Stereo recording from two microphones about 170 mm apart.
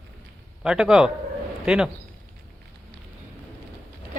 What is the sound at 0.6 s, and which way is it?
Speech, 5° right (ahead or behind).